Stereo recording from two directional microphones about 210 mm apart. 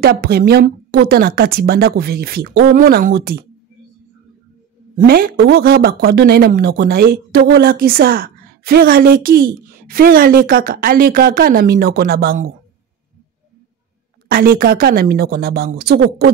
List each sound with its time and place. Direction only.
0.0 s speech: 45° right (ahead or behind)
4.9 s speech: 45° right (ahead or behind)
14.3 s speech: 45° right (ahead or behind)